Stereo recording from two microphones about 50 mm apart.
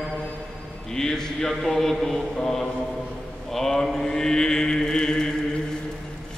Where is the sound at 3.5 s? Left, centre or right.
Centre.